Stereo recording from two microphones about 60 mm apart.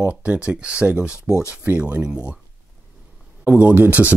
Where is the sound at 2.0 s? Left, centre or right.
Centre.